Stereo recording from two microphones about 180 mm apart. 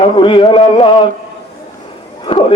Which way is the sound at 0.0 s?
30° left (ahead or behind).